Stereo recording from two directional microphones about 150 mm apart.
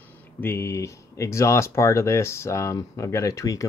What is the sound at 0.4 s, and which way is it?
Speech, 15° left (ahead or behind).